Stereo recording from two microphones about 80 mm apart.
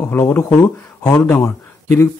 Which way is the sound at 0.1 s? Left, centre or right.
Left.